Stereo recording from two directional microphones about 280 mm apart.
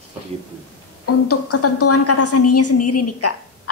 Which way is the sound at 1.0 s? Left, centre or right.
Left.